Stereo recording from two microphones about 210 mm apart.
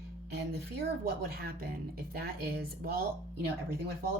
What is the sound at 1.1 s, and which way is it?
Speech, 45° right (ahead or behind).